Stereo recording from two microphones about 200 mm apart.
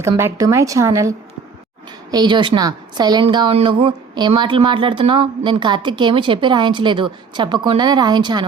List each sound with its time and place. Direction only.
0.0 s a woman's voice: 15° right (ahead or behind)